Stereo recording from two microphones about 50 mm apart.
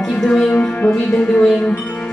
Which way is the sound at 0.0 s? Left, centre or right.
Centre.